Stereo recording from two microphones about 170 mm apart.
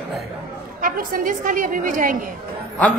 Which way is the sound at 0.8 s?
55° right (ahead or behind).